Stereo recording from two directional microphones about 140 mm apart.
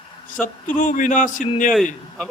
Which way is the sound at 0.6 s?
70° left (ahead or behind).